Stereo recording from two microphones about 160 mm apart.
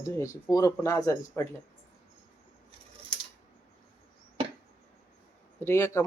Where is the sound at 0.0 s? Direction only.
20° left (ahead or behind).